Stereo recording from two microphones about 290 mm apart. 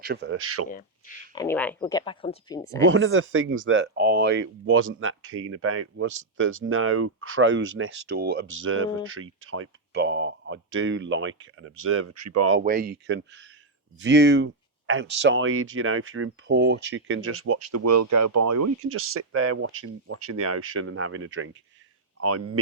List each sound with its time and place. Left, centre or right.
0.0 s speech: right
0.7 s speech: left
1.3 s speech: centre
2.9 s speech: right
12.5 s speech: right
18.9 s speech: right
22.2 s speech: right